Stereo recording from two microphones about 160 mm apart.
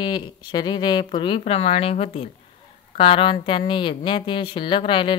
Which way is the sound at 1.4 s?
40° left (ahead or behind).